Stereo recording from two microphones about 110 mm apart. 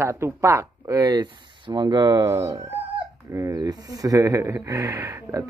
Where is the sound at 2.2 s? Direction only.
25° right (ahead or behind).